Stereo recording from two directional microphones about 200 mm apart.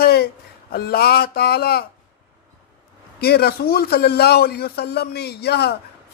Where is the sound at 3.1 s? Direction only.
50° left (ahead or behind).